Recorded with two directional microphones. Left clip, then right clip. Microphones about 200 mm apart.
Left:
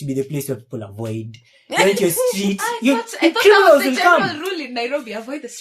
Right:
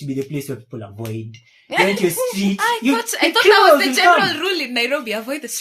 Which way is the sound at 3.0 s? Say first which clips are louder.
Left 1 dB; 45° right (ahead or behind).